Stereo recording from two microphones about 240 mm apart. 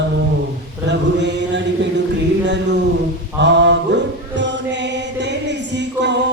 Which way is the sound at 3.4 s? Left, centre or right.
Right.